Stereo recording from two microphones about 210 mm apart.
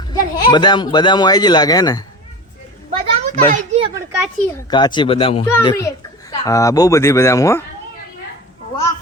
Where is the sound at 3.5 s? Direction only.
30° right (ahead or behind).